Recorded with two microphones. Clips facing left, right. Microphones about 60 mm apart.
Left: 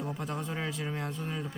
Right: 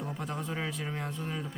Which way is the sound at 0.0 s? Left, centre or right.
Centre.